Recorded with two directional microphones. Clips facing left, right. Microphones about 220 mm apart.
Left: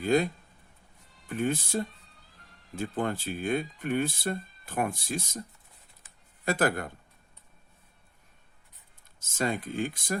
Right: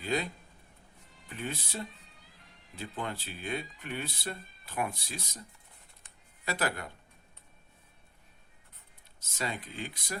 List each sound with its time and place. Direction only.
0.0 s speech: 50° left (ahead or behind)
1.3 s speech: 50° left (ahead or behind)
6.4 s speech: 50° left (ahead or behind)
9.2 s speech: 50° left (ahead or behind)